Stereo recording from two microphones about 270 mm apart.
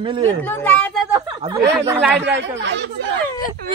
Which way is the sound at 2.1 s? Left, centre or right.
Right.